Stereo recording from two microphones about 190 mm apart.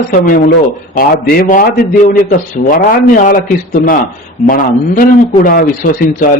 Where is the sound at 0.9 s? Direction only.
55° left (ahead or behind).